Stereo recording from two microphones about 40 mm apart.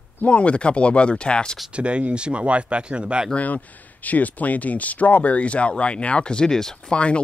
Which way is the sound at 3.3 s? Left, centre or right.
Left.